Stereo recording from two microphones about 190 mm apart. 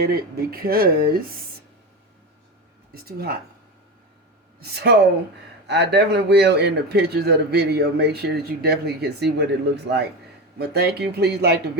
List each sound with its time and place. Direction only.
0.0 s speech: 55° right (ahead or behind)
4.6 s a man's voice: 60° right (ahead or behind)